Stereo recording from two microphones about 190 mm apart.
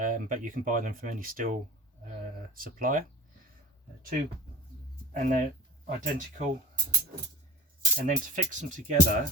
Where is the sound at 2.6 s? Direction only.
45° right (ahead or behind).